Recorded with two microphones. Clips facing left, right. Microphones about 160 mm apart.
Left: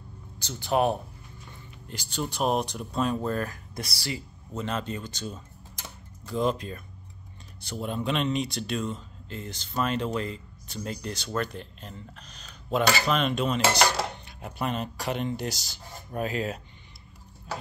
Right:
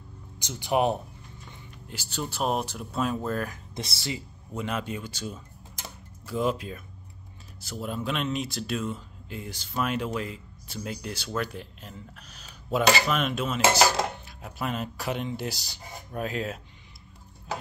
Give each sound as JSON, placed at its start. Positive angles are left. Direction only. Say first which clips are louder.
{"t": 0.4, "sound": "speech", "louder": "even", "side_deg": -15}
{"t": 3.4, "sound": "speech", "louder": "even", "side_deg": -20}
{"t": 4.6, "sound": "speech", "louder": "even", "side_deg": -10}